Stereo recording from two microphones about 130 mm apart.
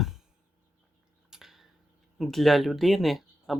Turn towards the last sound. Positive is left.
turn(degrees=0)  # may be behind; listen again after turning